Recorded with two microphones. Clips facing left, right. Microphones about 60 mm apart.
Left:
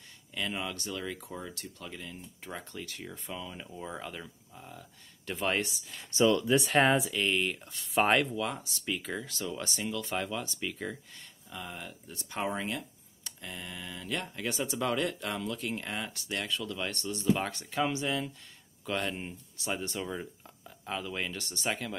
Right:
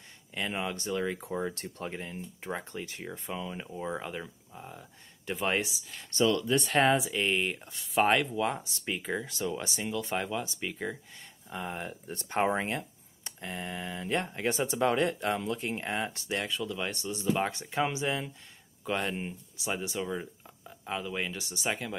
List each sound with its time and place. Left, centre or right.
0.3 s speech: right
5.3 s speech: centre
6.0 s speech: centre
7.1 s speech: centre
7.8 s speech: centre
8.4 s speech: right
11.5 s speech: right; by 21.9 s centre